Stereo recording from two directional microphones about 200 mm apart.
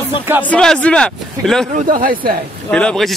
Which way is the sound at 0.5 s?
5° left (ahead or behind).